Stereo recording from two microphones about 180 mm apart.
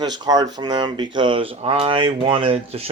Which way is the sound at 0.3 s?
20° right (ahead or behind).